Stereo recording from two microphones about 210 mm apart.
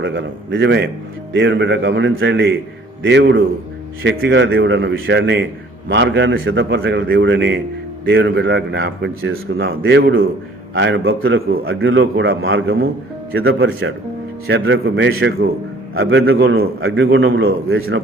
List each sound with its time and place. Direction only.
0.0 s a man's voice: 60° right (ahead or behind)
6.8 s a man's voice: 55° right (ahead or behind); by 12.7 s 70° right (ahead or behind)
13.4 s speech: 50° right (ahead or behind)
14.4 s a man's voice: 70° right (ahead or behind)
16.0 s a man's voice: 70° right (ahead or behind)